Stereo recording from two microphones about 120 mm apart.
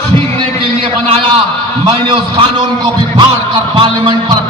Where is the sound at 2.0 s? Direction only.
45° right (ahead or behind).